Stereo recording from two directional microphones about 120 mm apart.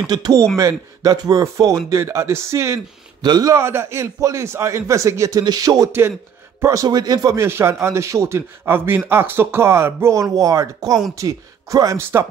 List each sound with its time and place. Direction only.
0.0 s speech: 30° right (ahead or behind)
3.2 s a man's voice: 35° right (ahead or behind)
3.5 s speech: 20° right (ahead or behind)